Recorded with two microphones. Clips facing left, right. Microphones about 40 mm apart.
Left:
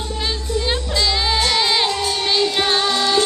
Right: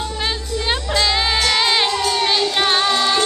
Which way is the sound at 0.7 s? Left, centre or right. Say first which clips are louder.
Right 4 dB; centre.